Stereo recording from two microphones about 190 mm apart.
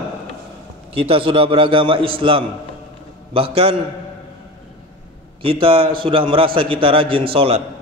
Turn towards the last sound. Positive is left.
turn(degrees=-30)  # may be behind; listen again after turning